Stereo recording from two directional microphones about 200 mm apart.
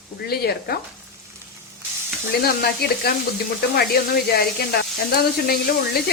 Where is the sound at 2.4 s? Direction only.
50° left (ahead or behind).